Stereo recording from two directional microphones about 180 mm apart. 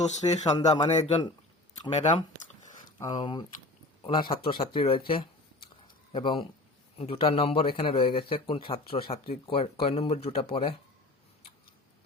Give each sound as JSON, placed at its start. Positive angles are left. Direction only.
{"t": 0.2, "sound": "speech", "side_deg": 25}
{"t": 0.6, "sound": "speech", "side_deg": 40}
{"t": 3.0, "sound": "speech", "side_deg": 25}